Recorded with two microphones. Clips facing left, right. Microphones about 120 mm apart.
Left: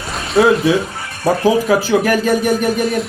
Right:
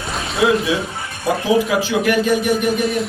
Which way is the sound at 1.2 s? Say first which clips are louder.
Left 3 dB; 40° left (ahead or behind).